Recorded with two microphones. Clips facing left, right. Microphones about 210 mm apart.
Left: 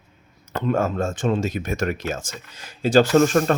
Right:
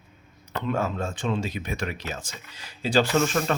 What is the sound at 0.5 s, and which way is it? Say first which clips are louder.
Speech: left 5 dB; 50° left (ahead or behind).